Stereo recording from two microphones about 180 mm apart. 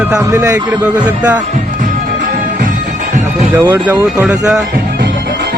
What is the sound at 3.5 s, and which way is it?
Speech, 10° right (ahead or behind).